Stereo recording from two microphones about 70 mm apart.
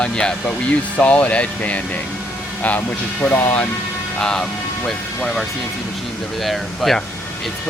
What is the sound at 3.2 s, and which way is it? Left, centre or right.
Speech, centre.